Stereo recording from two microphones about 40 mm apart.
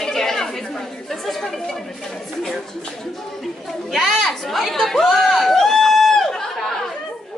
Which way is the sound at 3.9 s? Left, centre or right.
Centre.